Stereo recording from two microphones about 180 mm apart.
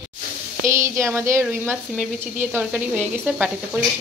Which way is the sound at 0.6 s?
15° right (ahead or behind).